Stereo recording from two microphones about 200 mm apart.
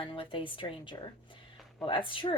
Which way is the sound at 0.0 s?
25° left (ahead or behind).